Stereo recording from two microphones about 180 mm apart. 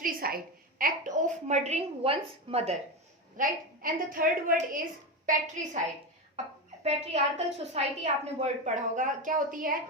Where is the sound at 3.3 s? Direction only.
50° right (ahead or behind).